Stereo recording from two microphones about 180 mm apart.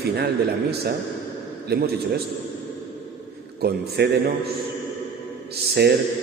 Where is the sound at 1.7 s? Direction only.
60° right (ahead or behind).